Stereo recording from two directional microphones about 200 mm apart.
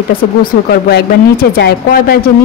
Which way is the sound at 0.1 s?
50° left (ahead or behind).